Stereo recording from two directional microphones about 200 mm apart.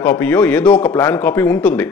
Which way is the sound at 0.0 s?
5° left (ahead or behind).